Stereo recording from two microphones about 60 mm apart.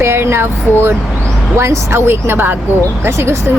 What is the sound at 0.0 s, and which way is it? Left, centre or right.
Speech, right.